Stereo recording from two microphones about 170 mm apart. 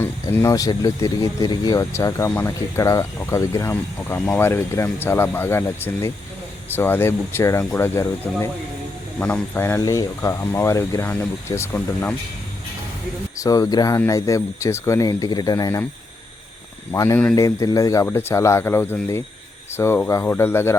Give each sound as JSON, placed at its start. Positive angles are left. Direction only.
{"t": 0.0, "sound": "speech", "side_deg": 10}
{"t": 13.3, "sound": "speech", "side_deg": 20}
{"t": 16.9, "sound": "speech", "side_deg": 15}